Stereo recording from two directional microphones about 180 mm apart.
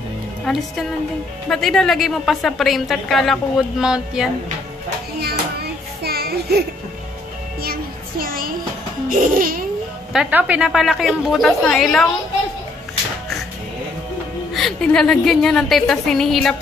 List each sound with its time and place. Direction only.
0.5 s a woman's voice: centre (ahead or behind)
5.6 s child singing: 60° right (ahead or behind)
7.6 s child singing: 55° right (ahead or behind)
9.1 s babbling: 50° right (ahead or behind)
10.1 s a woman's voice: 5° right (ahead or behind)
14.5 s a woman's voice: centre (ahead or behind)